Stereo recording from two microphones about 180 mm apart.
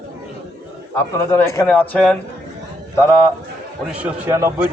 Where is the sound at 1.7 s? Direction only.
5° left (ahead or behind).